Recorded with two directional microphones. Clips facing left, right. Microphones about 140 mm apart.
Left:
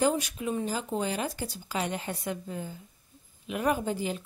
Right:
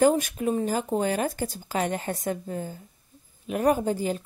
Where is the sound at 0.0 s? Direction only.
50° right (ahead or behind).